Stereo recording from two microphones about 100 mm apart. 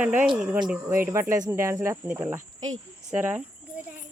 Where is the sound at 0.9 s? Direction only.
30° right (ahead or behind).